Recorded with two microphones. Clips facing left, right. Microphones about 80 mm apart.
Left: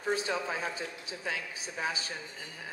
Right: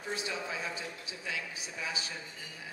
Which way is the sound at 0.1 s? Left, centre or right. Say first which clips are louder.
Left 6 dB; left.